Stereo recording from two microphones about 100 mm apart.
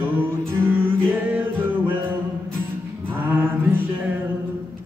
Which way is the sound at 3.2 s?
20° right (ahead or behind).